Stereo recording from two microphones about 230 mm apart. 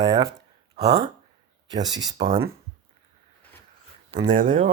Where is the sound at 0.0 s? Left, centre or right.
Centre.